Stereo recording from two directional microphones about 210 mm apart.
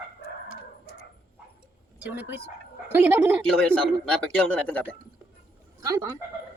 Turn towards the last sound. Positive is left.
turn(degrees=-15)  # may be behind; listen again after turning